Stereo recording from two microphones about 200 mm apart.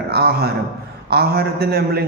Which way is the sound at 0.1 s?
55° right (ahead or behind).